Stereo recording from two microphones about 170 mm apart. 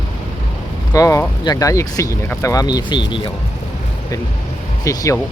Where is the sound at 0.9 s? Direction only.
20° left (ahead or behind).